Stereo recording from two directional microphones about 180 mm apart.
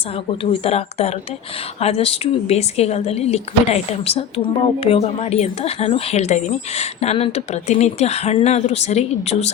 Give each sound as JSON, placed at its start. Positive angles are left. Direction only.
{"t": 0.6, "sound": "speech", "side_deg": 35}